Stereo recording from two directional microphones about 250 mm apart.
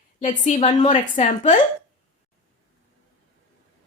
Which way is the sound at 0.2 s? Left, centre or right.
Left.